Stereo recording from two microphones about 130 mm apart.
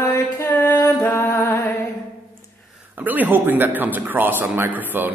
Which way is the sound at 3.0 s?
15° right (ahead or behind).